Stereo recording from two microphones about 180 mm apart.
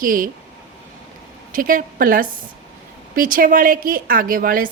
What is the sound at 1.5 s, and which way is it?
A woman's voice, 50° right (ahead or behind).